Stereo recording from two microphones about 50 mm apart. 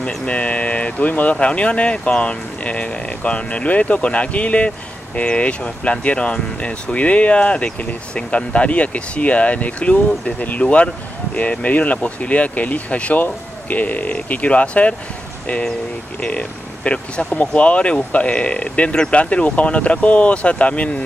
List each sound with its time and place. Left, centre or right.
0.0 s speech: left
16.2 s speech: left